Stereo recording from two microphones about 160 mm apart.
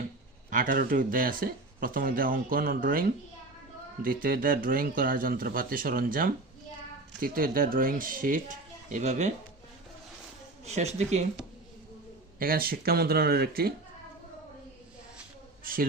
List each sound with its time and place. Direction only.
0.5 s speech: 60° right (ahead or behind)
10.7 s speech: 45° right (ahead or behind)
12.4 s speech: 65° right (ahead or behind)
15.6 s a woman's voice: 65° right (ahead or behind)